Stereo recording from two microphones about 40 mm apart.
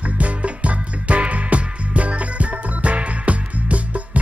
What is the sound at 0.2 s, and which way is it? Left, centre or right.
Music, right.